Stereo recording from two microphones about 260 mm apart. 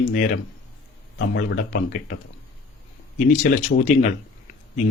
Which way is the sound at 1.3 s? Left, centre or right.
Left.